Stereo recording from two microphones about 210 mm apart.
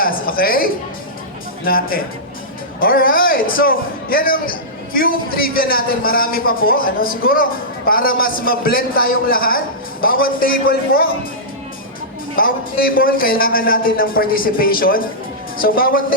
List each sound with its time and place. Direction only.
0.0 s music: 45° left (ahead or behind)
1.6 s speech: 45° left (ahead or behind)
12.4 s speech: 45° left (ahead or behind)